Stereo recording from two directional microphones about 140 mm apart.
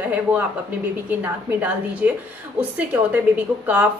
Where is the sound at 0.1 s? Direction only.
10° right (ahead or behind).